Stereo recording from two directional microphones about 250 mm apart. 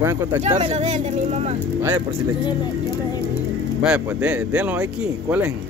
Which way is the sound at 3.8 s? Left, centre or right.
Centre.